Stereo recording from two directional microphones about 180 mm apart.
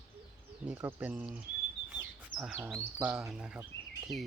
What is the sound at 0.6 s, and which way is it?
Speech, 10° right (ahead or behind).